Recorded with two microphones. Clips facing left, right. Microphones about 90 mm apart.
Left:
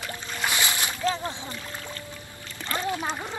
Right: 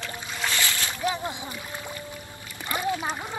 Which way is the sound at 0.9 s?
15° right (ahead or behind).